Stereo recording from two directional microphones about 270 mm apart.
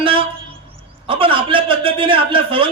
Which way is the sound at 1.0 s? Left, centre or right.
Centre.